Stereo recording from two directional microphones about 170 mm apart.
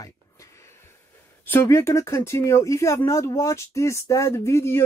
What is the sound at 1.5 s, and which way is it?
Speech, 15° left (ahead or behind).